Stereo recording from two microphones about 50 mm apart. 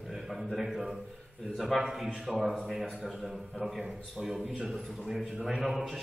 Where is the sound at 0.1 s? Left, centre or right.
Centre.